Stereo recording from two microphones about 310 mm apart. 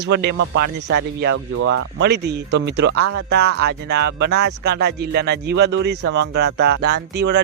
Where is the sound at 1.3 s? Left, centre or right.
Right.